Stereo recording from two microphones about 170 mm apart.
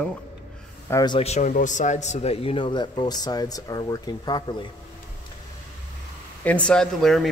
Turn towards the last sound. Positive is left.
turn(degrees=0)  # may be behind; listen again after turning